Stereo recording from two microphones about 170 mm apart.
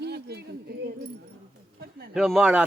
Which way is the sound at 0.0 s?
70° right (ahead or behind).